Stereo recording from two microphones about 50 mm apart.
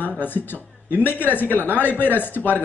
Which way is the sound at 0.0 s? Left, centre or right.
Left.